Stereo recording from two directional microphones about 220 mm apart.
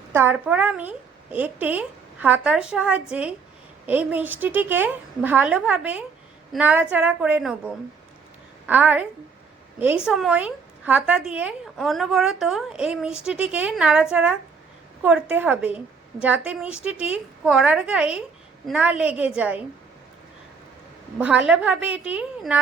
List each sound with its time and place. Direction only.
0.1 s a woman's voice: 10° right (ahead or behind)
21.2 s speech: 5° right (ahead or behind)